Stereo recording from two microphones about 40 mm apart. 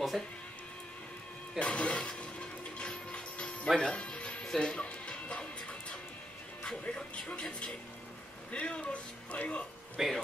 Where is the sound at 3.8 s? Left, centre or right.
Left.